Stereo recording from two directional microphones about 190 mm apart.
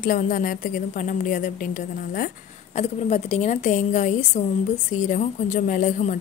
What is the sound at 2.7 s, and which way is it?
A woman's voice, 35° left (ahead or behind).